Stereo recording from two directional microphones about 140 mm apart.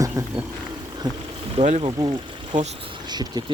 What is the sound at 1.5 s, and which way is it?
Speech, 55° right (ahead or behind).